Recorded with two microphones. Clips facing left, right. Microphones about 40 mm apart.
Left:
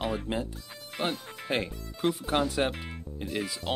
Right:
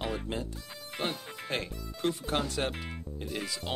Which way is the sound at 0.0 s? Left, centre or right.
Centre.